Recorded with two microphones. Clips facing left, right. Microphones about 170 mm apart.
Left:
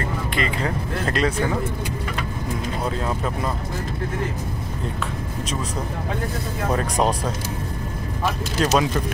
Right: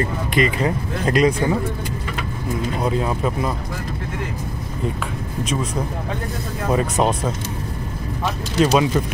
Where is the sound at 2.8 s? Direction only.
10° right (ahead or behind).